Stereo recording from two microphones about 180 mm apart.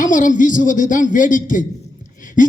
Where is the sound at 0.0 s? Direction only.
45° left (ahead or behind).